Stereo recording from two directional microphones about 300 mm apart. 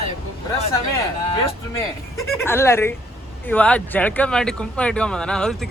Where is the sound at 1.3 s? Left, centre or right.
Centre.